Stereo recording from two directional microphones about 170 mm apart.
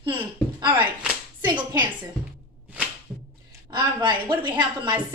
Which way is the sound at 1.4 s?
25° right (ahead or behind).